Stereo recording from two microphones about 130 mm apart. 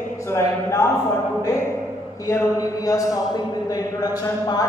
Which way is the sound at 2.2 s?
25° left (ahead or behind).